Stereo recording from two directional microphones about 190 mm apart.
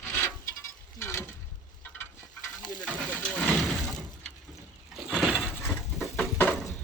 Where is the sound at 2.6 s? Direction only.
45° left (ahead or behind).